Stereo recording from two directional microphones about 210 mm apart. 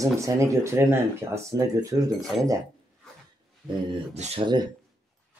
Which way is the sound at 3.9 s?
25° right (ahead or behind).